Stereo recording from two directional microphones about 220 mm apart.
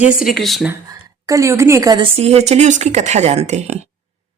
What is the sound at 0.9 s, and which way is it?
A woman's voice, 15° right (ahead or behind).